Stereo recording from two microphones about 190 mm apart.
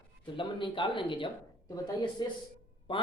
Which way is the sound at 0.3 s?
25° left (ahead or behind).